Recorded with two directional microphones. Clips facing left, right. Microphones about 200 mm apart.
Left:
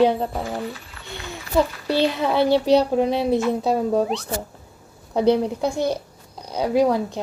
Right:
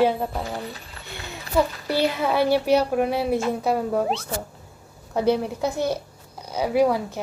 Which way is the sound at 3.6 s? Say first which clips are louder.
Left 3 dB; 15° left (ahead or behind).